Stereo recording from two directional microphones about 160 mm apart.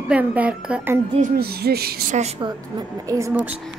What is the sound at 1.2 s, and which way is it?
Speech, 75° right (ahead or behind).